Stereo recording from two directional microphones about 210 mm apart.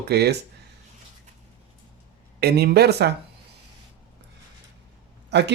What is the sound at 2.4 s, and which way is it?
Speech, 50° right (ahead or behind).